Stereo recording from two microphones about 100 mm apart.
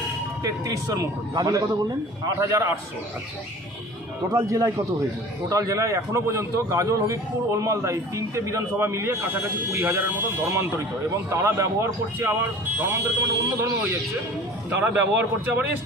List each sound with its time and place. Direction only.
0.4 s a man's voice: 35° right (ahead or behind)
4.3 s a man's voice: 35° right (ahead or behind)
14.8 s speech: 20° right (ahead or behind)